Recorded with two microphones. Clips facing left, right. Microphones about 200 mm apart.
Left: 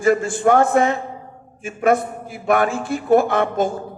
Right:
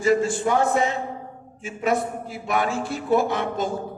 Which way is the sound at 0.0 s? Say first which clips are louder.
Left 3 dB; 55° left (ahead or behind).